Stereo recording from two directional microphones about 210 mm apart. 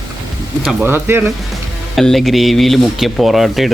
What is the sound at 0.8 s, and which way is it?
Speech, 10° right (ahead or behind).